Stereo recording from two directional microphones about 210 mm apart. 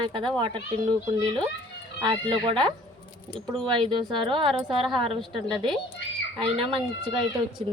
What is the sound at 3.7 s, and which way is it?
Speech, 20° right (ahead or behind).